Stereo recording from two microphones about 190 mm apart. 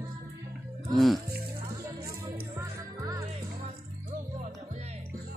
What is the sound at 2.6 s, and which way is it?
Music, 15° right (ahead or behind).